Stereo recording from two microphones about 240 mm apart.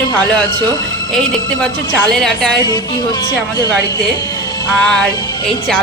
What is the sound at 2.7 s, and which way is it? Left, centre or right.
Speech, centre.